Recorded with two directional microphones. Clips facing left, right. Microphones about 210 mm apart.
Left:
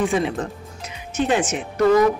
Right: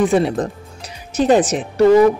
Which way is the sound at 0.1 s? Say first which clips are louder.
Right 6 dB; 35° right (ahead or behind).